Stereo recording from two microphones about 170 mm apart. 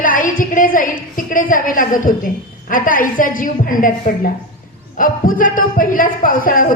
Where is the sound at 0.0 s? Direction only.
55° left (ahead or behind).